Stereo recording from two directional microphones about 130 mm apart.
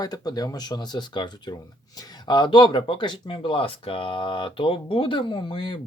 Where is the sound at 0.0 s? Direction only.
30° left (ahead or behind).